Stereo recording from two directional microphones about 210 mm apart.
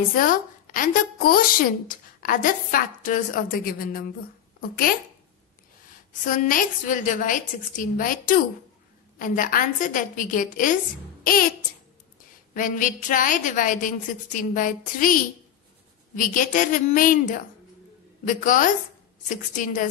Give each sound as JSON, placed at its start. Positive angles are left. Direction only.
{"t": 0.1, "sound": "a woman's voice", "side_deg": 40}
{"t": 6.2, "sound": "a woman's voice", "side_deg": 40}
{"t": 12.5, "sound": "a woman's voice", "side_deg": 40}
{"t": 16.2, "sound": "a woman's voice", "side_deg": 40}